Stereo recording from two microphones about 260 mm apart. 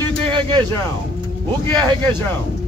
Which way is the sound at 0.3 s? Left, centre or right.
Centre.